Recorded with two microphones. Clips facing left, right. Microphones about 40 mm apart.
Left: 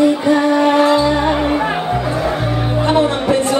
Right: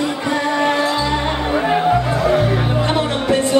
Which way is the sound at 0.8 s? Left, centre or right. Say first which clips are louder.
Left 6 dB; left.